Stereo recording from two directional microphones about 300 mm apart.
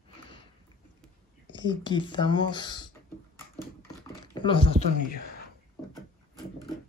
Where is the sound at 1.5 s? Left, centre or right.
Centre.